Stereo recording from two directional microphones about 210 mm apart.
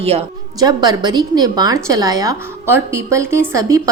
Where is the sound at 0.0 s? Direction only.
30° right (ahead or behind).